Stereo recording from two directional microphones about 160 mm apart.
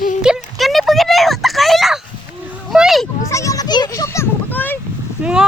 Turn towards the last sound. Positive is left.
turn(degrees=-5)  # may be behind; listen again after turning